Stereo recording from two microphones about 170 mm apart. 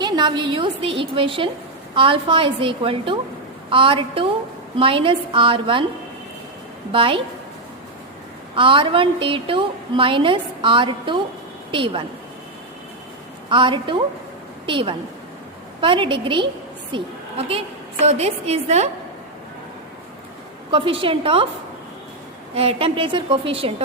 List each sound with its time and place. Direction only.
0.0 s a woman's voice: 25° right (ahead or behind)
6.9 s a woman's voice: 30° right (ahead or behind)
8.5 s a woman's voice: 30° right (ahead or behind)
13.5 s a woman's voice: 30° right (ahead or behind)
20.7 s a woman's voice: 30° right (ahead or behind)
22.5 s a woman's voice: 35° right (ahead or behind)